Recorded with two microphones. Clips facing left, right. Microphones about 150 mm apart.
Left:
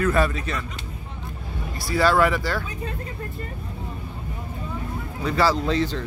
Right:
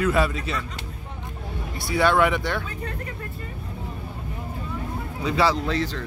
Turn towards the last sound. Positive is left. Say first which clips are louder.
# left 3 dB
turn(degrees=25)  # may be behind; listen again after turning